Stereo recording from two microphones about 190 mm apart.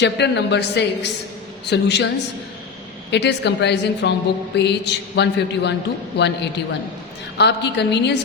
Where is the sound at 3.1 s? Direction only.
65° left (ahead or behind).